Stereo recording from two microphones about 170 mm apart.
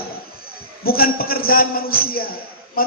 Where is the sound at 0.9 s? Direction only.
60° left (ahead or behind).